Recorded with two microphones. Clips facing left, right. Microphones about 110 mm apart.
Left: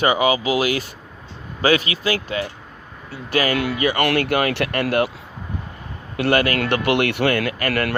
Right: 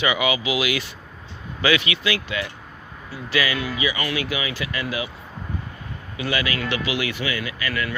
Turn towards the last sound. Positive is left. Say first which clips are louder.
# left 6 dB
turn(degrees=65)  # may be behind; listen again after turning